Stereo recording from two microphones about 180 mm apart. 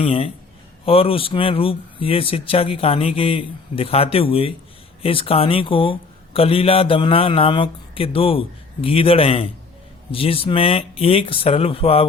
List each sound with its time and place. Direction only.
0.0 s speech: 30° left (ahead or behind)